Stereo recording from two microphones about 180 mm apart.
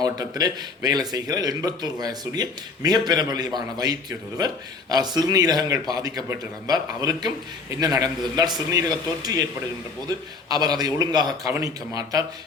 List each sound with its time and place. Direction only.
0.0 s speech: 20° right (ahead or behind)